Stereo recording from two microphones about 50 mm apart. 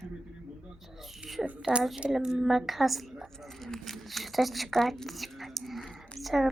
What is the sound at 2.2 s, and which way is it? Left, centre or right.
A woman's voice, centre.